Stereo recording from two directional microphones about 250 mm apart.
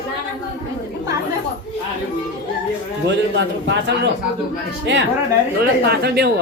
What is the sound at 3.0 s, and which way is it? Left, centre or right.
A man's voice, right.